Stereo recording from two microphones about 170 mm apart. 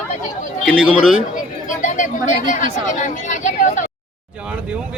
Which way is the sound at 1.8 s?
50° left (ahead or behind).